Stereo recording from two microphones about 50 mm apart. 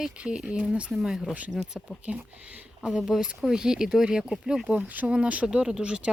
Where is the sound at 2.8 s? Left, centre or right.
Centre.